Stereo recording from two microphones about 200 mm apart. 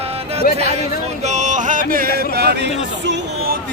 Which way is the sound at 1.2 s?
35° right (ahead or behind).